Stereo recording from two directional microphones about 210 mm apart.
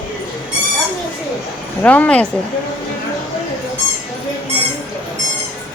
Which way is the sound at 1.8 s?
5° left (ahead or behind).